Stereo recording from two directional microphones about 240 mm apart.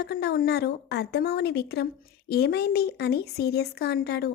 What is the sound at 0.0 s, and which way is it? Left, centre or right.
Speech, left.